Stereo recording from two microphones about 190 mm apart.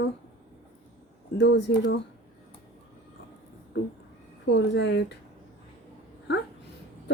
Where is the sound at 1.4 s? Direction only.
70° left (ahead or behind).